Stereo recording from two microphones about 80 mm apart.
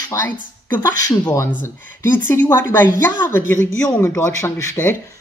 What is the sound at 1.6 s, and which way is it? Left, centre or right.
A woman's voice, left.